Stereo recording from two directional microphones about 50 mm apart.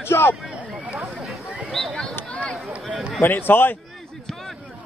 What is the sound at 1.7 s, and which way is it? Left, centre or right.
Speech, centre.